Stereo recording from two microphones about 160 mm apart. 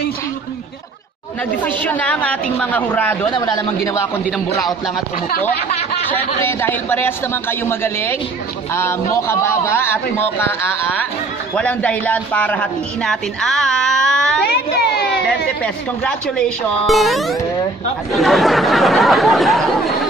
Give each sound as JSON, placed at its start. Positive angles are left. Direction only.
{"t": 1.6, "sound": "a man's voice", "side_deg": 10}
{"t": 3.3, "sound": "a man's voice", "side_deg": 25}
{"t": 6.1, "sound": "a man's voice", "side_deg": 10}
{"t": 14.4, "sound": "a sound", "side_deg": 85}
{"t": 15.6, "sound": "speech", "side_deg": 5}